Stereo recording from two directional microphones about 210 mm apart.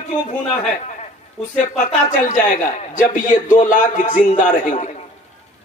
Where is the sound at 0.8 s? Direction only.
35° left (ahead or behind).